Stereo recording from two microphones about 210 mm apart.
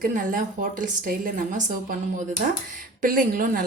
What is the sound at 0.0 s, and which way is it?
A woman's voice, 40° right (ahead or behind).